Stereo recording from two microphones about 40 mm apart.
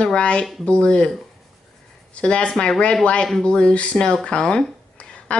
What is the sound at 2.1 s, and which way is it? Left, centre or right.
A woman's voice, left.